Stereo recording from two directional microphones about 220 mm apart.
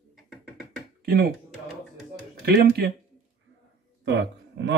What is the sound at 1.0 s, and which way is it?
Speech, 45° right (ahead or behind).